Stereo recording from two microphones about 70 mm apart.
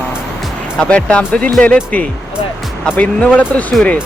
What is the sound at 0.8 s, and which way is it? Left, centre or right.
Speech, centre.